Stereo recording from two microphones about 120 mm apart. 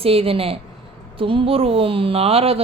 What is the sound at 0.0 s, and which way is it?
Speech, 55° right (ahead or behind).